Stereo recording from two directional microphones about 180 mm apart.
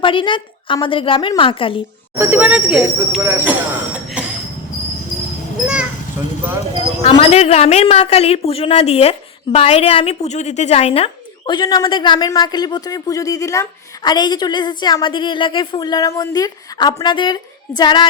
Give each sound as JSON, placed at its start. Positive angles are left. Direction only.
{"t": 0.0, "sound": "a woman's voice", "side_deg": 30}
{"t": 2.1, "sound": "speech", "side_deg": -10}
{"t": 4.2, "sound": "train", "side_deg": -5}
{"t": 6.2, "sound": "clip-clop", "side_deg": -10}
{"t": 7.0, "sound": "a woman's voice", "side_deg": 35}